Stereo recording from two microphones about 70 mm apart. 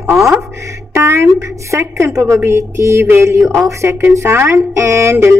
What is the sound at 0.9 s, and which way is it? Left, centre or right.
Speech, right.